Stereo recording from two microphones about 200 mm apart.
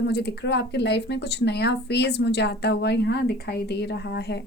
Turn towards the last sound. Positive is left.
turn(degrees=55)  # may be behind; listen again after turning